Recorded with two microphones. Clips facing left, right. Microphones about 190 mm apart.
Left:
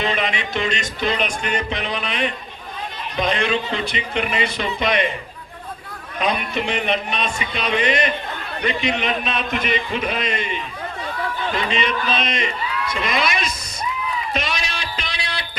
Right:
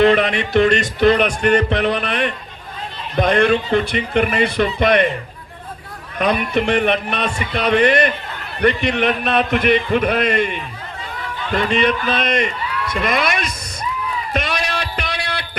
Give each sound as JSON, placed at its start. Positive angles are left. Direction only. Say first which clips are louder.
{"t": 0.0, "sound": "speech", "louder": "right 9 dB", "side_deg": -60}
{"t": 6.1, "sound": "speech", "louder": "right 5 dB", "side_deg": -60}
{"t": 14.3, "sound": "a sound", "louder": "right 4 dB", "side_deg": -60}